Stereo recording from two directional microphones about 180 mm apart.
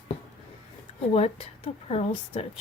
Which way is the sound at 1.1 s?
35° left (ahead or behind).